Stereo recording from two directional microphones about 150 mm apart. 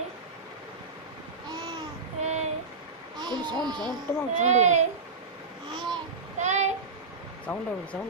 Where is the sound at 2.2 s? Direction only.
45° right (ahead or behind).